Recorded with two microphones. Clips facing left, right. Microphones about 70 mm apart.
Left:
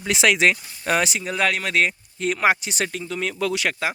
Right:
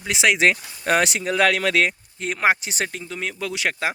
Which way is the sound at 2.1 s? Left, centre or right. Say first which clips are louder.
Left 1 dB; right.